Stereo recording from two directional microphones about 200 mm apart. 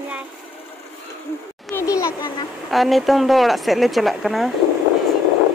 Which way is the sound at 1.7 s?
15° left (ahead or behind).